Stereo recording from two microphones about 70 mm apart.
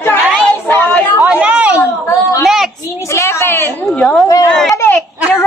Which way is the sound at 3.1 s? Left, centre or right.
Left.